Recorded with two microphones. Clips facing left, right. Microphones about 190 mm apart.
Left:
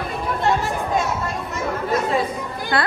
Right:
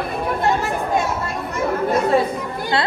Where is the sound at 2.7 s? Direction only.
25° right (ahead or behind).